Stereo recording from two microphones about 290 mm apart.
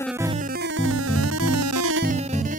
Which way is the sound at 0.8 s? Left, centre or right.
Right.